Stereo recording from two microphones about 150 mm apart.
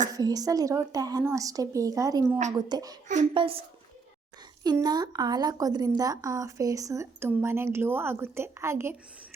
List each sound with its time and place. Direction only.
0.1 s a woman's voice: 25° right (ahead or behind)
3.3 s a child's voice: 35° right (ahead or behind)
4.6 s a woman's voice: 25° right (ahead or behind)